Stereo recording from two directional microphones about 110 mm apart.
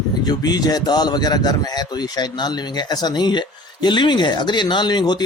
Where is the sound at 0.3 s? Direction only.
35° left (ahead or behind).